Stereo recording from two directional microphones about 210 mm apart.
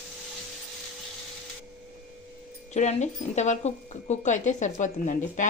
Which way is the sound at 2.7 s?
35° left (ahead or behind).